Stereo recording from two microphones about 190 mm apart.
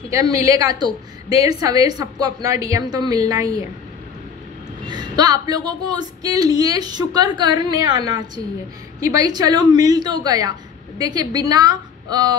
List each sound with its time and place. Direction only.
0.1 s a woman's voice: 20° right (ahead or behind)
4.8 s a woman's voice: 20° right (ahead or behind)